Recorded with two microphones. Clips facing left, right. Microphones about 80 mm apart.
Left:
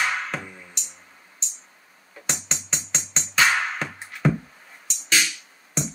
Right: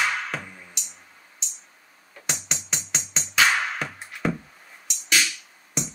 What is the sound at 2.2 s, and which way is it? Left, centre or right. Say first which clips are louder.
Music: left 1 dB; left.